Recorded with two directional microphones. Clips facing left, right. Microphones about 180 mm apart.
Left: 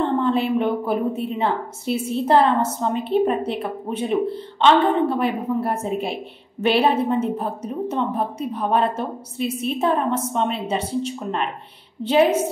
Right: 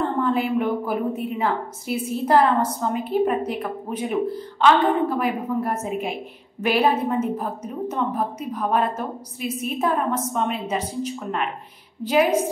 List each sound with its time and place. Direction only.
0.0 s a woman's voice: 25° left (ahead or behind)